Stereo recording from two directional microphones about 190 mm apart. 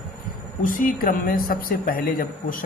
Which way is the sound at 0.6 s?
45° left (ahead or behind).